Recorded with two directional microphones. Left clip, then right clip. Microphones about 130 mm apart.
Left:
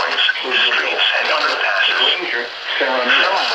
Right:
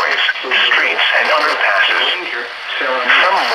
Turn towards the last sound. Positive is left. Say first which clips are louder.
# right 3 dB
turn(degrees=-40)  # may be behind; listen again after turning